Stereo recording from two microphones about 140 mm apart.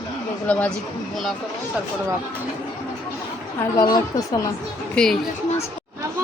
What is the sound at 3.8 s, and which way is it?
Speech, 25° left (ahead or behind).